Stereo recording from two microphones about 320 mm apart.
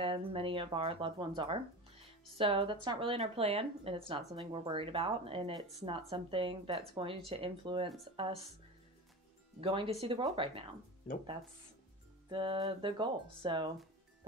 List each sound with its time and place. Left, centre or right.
0.0 s speech: centre
9.6 s speech: centre
12.3 s speech: centre